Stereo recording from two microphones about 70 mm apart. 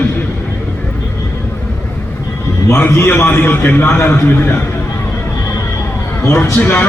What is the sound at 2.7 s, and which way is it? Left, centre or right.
A man's voice, left.